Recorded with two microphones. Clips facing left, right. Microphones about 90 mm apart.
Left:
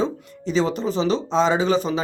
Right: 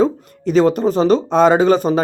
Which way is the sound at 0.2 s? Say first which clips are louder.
Right 8 dB; 50° right (ahead or behind).